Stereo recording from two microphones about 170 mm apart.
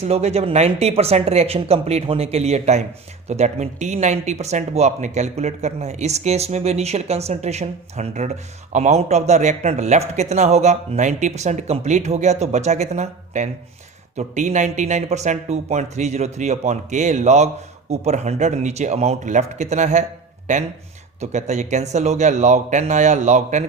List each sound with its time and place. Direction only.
0.0 s speech: 40° right (ahead or behind)
21.2 s speech: 45° right (ahead or behind)